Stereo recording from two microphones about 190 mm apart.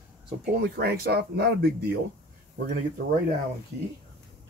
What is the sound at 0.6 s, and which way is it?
Speech, 55° right (ahead or behind).